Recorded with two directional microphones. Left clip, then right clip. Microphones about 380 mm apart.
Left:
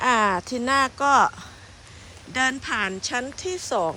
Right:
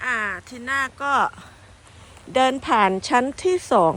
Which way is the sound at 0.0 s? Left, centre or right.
Centre.